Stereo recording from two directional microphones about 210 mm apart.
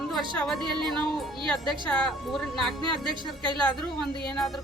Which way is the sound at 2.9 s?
20° right (ahead or behind).